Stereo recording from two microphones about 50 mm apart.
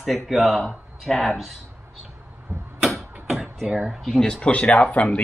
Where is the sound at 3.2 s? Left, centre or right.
Centre.